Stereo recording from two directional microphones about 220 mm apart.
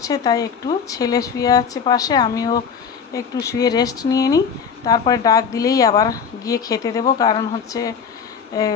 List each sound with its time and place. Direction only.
0.0 s a woman's voice: 15° left (ahead or behind)